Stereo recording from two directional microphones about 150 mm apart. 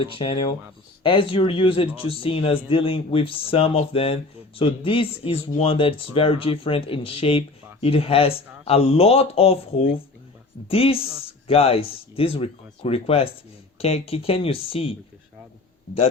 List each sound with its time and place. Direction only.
0.0 s speech: 35° left (ahead or behind)